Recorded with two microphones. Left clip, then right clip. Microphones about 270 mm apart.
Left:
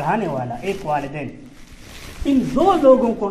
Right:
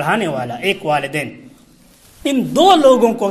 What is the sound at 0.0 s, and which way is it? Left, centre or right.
A man's voice, right.